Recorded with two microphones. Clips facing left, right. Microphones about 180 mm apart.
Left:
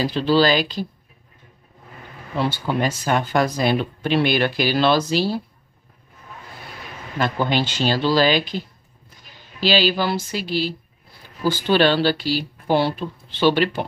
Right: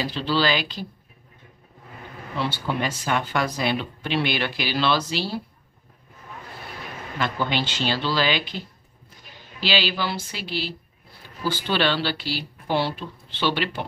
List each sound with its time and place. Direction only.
0.0 s speech: 45° left (ahead or behind)
2.3 s speech: 45° left (ahead or behind)
7.2 s speech: 40° left (ahead or behind)